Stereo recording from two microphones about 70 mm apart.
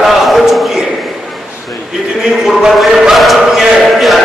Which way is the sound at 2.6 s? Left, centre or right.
Centre.